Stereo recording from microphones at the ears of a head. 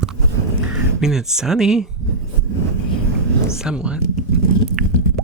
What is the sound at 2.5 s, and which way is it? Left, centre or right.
Vehicle, right.